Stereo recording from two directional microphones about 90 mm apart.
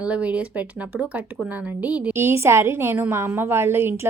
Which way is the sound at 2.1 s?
25° right (ahead or behind).